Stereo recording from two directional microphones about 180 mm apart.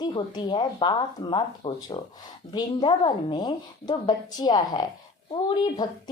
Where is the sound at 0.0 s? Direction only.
25° left (ahead or behind).